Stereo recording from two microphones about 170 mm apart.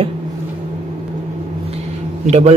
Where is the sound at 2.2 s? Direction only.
40° right (ahead or behind).